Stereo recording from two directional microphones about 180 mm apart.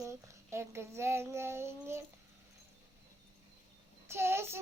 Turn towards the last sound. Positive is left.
turn(degrees=-15)  # may be behind; listen again after turning